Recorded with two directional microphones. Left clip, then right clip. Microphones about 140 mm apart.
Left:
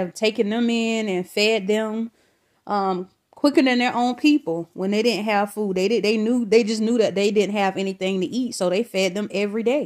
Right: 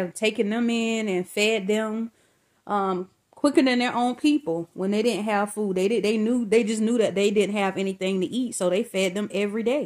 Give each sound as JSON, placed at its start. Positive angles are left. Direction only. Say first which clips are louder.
{"t": 0.0, "sound": "speech", "louder": "left 3 dB", "side_deg": 40}